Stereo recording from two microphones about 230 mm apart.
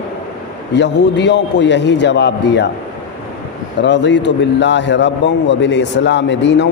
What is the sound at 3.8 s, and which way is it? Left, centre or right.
A man's voice, left.